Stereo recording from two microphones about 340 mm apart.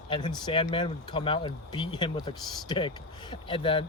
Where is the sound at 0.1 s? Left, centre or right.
Centre.